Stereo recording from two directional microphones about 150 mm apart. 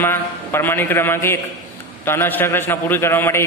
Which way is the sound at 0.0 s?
15° left (ahead or behind).